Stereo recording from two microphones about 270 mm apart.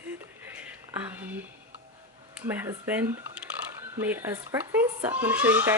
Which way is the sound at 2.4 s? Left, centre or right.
Centre.